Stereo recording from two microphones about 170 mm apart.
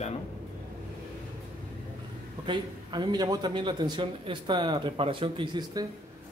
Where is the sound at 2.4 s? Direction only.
25° right (ahead or behind).